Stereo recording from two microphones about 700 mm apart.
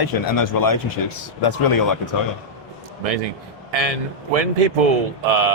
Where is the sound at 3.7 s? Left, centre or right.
Right.